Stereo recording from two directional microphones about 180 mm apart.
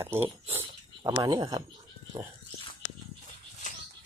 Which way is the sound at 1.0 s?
20° right (ahead or behind).